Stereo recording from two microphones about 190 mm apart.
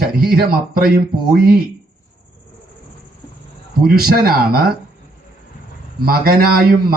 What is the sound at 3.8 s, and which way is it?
Speech, 50° right (ahead or behind).